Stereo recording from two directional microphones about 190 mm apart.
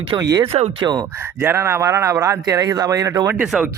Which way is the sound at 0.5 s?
30° right (ahead or behind).